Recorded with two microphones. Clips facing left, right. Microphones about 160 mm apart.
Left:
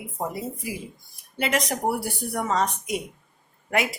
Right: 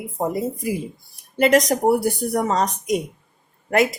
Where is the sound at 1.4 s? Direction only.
40° right (ahead or behind).